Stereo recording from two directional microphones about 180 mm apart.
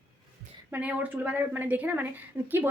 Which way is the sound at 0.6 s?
10° right (ahead or behind).